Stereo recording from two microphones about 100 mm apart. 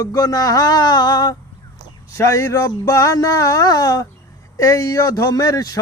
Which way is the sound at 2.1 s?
30° left (ahead or behind).